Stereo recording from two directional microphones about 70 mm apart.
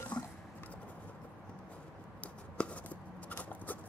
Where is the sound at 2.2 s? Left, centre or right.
Centre.